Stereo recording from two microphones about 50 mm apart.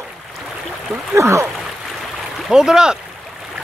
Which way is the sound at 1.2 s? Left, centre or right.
Right.